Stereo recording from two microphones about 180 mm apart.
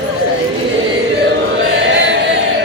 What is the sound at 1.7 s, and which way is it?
Chant, 80° right.